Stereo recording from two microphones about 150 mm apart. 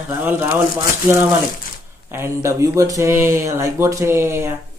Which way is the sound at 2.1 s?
20° right (ahead or behind).